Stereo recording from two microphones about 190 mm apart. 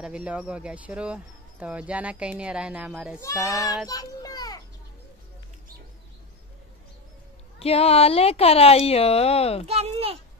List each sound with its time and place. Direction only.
0.0 s speech: 5° right (ahead or behind)
3.2 s speech: 15° left (ahead or behind)
3.9 s children playing: 20° left (ahead or behind)
7.5 s speech: 30° left (ahead or behind)
9.7 s a sound: 35° right (ahead or behind)